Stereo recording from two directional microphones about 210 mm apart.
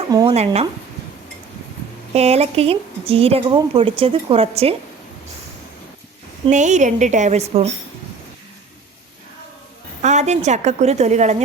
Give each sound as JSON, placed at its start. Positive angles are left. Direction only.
{"t": 0.1, "sound": "speech", "side_deg": -15}
{"t": 0.3, "sound": "speech", "side_deg": -30}
{"t": 2.1, "sound": "speech", "side_deg": -30}
{"t": 6.5, "sound": "a woman's voice", "side_deg": -35}
{"t": 10.0, "sound": "a woman's voice", "side_deg": -35}